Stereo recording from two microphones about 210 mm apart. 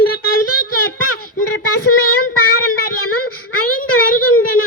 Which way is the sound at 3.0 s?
85° left.